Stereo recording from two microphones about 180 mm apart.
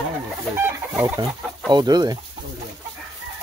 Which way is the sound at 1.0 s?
25° right (ahead or behind).